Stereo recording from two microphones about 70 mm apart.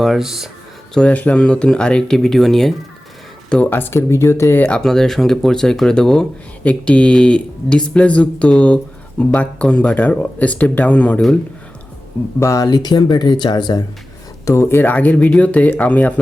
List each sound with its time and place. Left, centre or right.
0.0 s speech: centre
0.9 s speech: centre
3.7 s speech: left
4.6 s speech: centre
12.4 s speech: left
12.6 s speech: left
14.4 s speech: left
14.9 s speech: left